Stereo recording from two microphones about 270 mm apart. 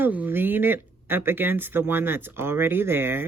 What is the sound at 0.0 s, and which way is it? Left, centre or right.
Speech, centre.